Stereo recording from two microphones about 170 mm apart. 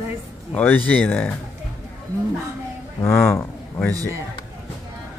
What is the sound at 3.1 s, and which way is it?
Speech, 5° left (ahead or behind).